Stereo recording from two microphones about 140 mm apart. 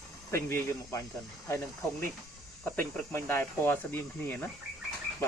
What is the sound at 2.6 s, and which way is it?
Speech, 5° left (ahead or behind).